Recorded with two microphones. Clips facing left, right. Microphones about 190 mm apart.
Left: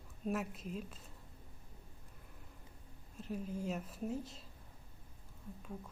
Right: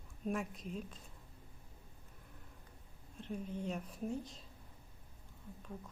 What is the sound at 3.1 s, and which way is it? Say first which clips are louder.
Speech: left 1 dB; 5° left (ahead or behind).